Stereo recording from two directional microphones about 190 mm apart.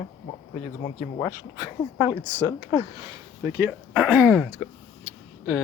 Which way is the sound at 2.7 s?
15° right (ahead or behind).